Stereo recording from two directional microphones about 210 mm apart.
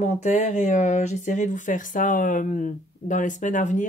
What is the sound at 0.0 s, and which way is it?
Speech, 35° left (ahead or behind).